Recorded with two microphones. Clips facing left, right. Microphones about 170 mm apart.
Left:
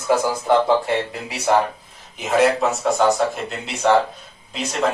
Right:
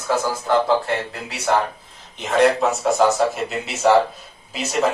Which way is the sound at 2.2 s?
5° left (ahead or behind).